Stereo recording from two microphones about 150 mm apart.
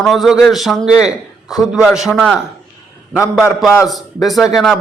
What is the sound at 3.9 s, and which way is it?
Speech, centre (ahead or behind).